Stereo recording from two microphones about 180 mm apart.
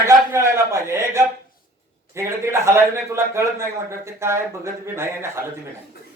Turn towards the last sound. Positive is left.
turn(degrees=-15)  # may be behind; listen again after turning